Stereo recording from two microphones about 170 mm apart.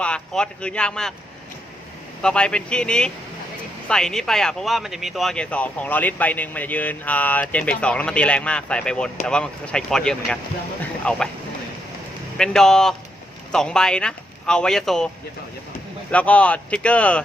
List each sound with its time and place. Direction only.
0.0 s a man's voice: 5° left (ahead or behind)
2.2 s speech: 5° left (ahead or behind)
12.4 s speech: 5° left (ahead or behind)
16.1 s speech: 10° left (ahead or behind)